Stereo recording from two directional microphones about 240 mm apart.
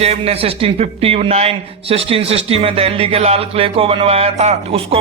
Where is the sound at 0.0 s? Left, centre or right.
Right.